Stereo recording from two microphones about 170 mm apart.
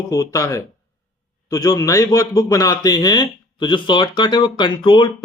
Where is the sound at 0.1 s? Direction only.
20° left (ahead or behind).